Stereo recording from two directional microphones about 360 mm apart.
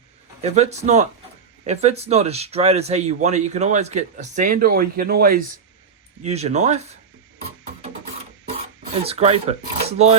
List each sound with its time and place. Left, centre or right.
0.4 s speech: centre
9.0 s speech: centre